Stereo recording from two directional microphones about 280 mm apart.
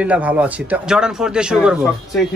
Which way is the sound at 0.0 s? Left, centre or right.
Centre.